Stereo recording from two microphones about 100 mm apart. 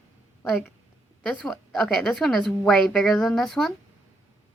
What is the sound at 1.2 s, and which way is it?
A woman's voice, 10° left (ahead or behind).